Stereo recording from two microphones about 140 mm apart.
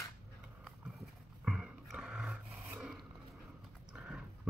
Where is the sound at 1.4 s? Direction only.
5° right (ahead or behind).